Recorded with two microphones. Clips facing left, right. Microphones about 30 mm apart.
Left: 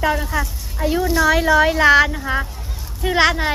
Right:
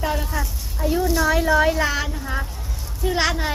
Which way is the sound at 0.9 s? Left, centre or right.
Left.